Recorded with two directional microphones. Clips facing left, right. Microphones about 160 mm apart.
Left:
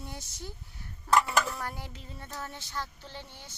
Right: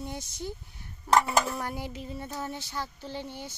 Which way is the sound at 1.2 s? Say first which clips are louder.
Right 3 dB; 20° right (ahead or behind).